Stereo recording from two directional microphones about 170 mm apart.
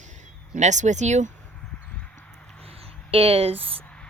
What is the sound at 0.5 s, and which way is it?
Speech, 45° right (ahead or behind).